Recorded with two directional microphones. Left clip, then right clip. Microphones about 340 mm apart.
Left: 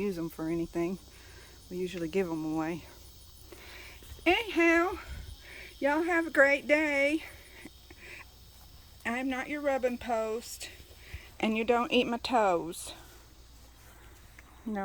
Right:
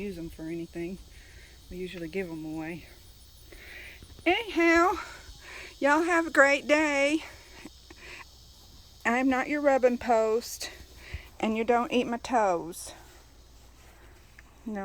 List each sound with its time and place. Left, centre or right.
0.0 s speech: centre
1.7 s speech: centre
2.4 s speech: left
3.5 s a sound: centre
9.0 s speech: centre
14.7 s speech: centre